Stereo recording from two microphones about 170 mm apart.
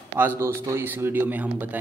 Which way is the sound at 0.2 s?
15° right (ahead or behind).